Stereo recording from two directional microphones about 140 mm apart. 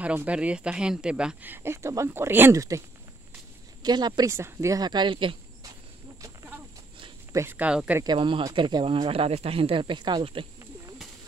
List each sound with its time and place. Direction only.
0.0 s speech: 10° right (ahead or behind)
3.8 s speech: 30° right (ahead or behind)
4.3 s speech: 20° right (ahead or behind); by 5.3 s 35° right (ahead or behind)
7.3 s speech: 15° right (ahead or behind)
8.0 s speech: 35° right (ahead or behind)